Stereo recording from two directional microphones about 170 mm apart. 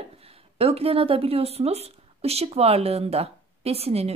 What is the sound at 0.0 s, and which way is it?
A woman's voice, 35° right (ahead or behind).